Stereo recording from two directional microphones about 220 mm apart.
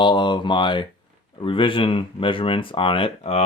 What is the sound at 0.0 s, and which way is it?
Speech, 20° left (ahead or behind).